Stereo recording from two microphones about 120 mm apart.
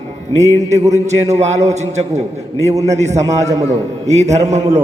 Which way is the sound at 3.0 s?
70° right (ahead or behind).